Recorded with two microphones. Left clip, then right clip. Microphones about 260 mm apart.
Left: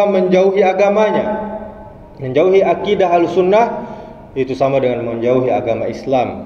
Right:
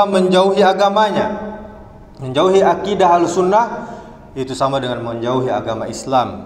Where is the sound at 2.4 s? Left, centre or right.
Centre.